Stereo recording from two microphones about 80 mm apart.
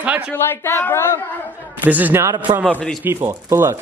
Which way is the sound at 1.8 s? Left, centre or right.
Right.